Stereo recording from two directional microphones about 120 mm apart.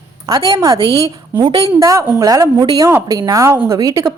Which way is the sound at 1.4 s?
45° right (ahead or behind).